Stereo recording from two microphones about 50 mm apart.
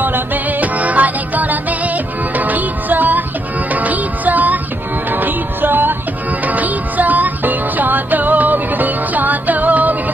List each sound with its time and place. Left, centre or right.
0.0 s music: right